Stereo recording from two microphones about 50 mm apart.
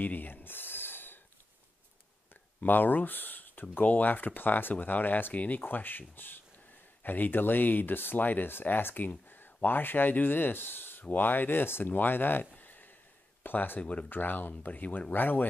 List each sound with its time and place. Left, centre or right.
0.0 s a sound: left
2.6 s speech: left
14.1 s speech: left